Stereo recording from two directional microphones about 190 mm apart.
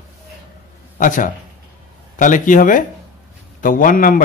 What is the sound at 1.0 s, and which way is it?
A man's voice, 45° left (ahead or behind).